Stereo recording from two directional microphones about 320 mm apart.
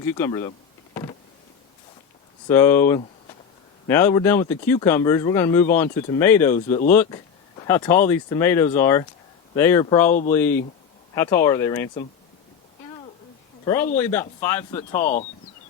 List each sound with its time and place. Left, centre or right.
0.0 s speech: centre
2.5 s speech: centre
10.1 s speech: left
10.3 s speech: centre
13.9 s speech: centre
15.0 s speech: left